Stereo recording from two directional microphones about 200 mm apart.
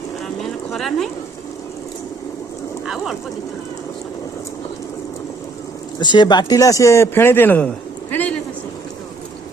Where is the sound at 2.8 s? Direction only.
Centre (ahead or behind).